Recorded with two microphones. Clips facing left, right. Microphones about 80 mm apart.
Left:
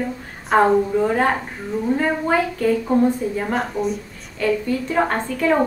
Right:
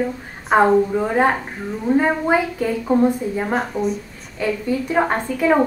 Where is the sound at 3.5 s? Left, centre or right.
Centre.